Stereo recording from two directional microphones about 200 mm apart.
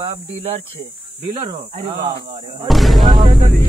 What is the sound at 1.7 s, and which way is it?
Speech, 35° right (ahead or behind).